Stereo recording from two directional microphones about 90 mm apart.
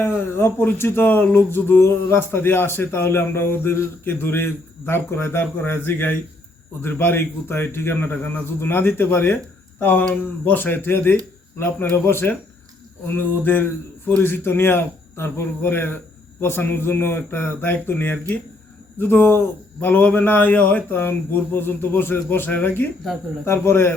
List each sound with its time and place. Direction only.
0.0 s speech: 25° left (ahead or behind)